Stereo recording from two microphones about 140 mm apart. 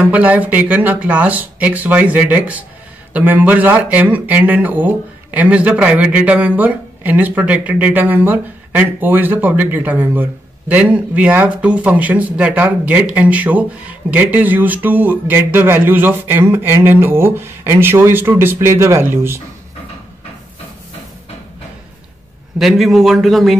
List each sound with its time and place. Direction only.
0.0 s speech: 10° right (ahead or behind)
22.6 s speech: centre (ahead or behind)